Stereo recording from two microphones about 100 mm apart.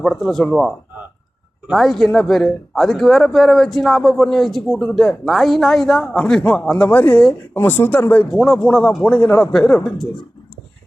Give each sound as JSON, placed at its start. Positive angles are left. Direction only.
{"t": 0.0, "sound": "speech", "side_deg": 0}
{"t": 8.3, "sound": "speech", "side_deg": 5}